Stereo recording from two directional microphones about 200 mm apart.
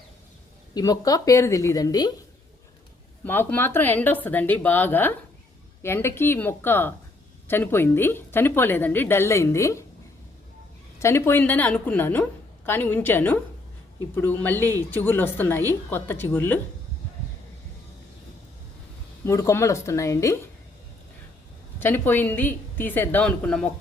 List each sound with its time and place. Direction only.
0.7 s a woman's voice: 20° left (ahead or behind)
3.2 s a woman's voice: 10° left (ahead or behind)
11.0 s a woman's voice: 10° left (ahead or behind)
19.2 s a woman's voice: 15° left (ahead or behind)
21.8 s a woman's voice: 10° left (ahead or behind)